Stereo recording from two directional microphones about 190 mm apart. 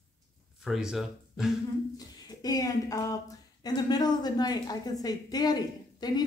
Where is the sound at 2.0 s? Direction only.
20° left (ahead or behind).